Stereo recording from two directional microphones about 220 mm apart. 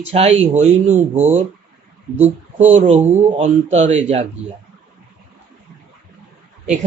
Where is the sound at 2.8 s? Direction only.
30° right (ahead or behind).